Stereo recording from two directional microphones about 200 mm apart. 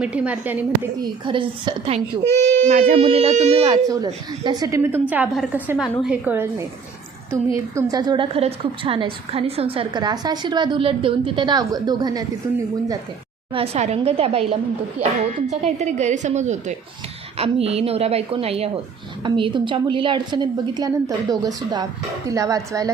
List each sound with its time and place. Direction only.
0.0 s a woman's voice: 5° right (ahead or behind)
1.0 s a woman's voice: 25° right (ahead or behind)
2.4 s speech: 40° right (ahead or behind)
3.8 s a woman's voice: 20° right (ahead or behind)
13.5 s a woman's voice: 30° right (ahead or behind)